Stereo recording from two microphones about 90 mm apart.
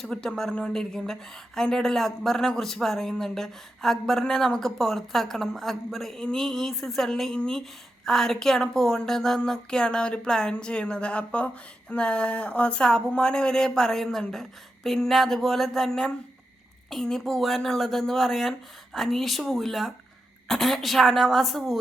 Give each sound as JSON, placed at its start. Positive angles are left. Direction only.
{"t": 0.0, "sound": "a woman's voice", "side_deg": 5}